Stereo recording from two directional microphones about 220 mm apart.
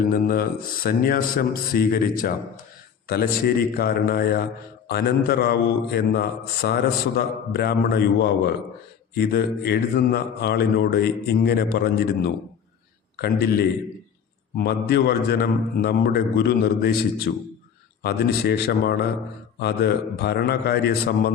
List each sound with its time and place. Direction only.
0.1 s a man's voice: 40° left (ahead or behind)